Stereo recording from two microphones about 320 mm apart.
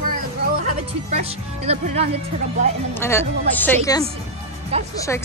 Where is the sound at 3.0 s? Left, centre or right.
Centre.